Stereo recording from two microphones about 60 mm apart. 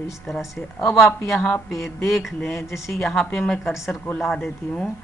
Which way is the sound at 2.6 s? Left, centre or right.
Left.